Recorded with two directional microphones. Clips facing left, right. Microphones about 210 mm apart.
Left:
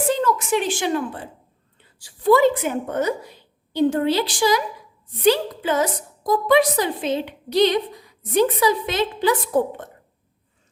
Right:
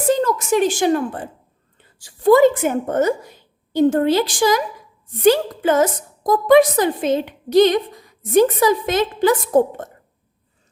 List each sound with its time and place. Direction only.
0.1 s a woman's voice: 40° right (ahead or behind)